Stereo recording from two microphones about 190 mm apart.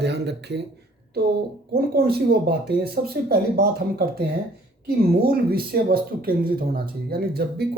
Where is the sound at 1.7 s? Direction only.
55° right (ahead or behind).